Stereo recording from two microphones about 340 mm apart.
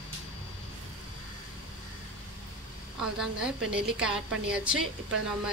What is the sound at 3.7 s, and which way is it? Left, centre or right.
A woman's voice, centre.